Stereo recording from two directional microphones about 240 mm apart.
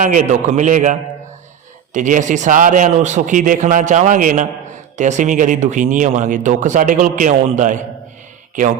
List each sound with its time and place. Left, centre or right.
0.0 s speech: right